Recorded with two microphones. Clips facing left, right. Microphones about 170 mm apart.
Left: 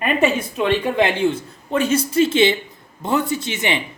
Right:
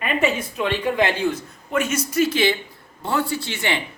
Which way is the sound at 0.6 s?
20° left (ahead or behind).